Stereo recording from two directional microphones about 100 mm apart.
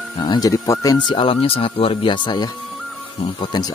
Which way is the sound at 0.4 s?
35° left (ahead or behind).